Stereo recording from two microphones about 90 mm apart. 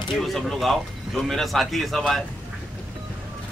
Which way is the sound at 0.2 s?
5° left (ahead or behind).